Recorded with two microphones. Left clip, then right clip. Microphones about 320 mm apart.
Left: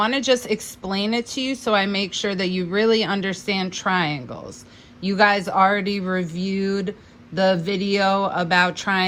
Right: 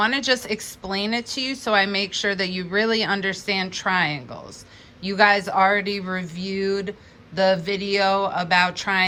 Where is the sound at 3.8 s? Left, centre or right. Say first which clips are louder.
Even; centre.